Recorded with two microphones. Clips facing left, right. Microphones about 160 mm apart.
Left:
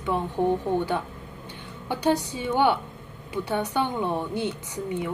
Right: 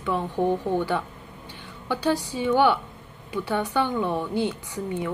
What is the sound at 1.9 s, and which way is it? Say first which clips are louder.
A woman's voice: left 1 dB; 20° left (ahead or behind).